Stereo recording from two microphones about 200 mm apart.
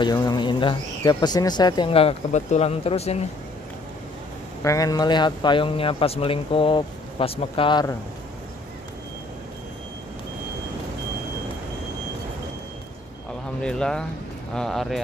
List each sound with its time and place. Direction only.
0.0 s a man's voice: 20° left (ahead or behind)
4.6 s a man's voice: 20° left (ahead or behind)
13.6 s speech: 5° left (ahead or behind)